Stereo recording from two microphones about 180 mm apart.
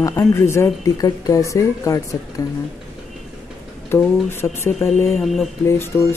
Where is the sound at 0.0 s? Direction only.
15° left (ahead or behind).